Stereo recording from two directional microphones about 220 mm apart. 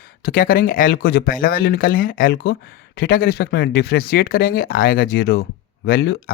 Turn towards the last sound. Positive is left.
turn(degrees=45)  # may be behind; listen again after turning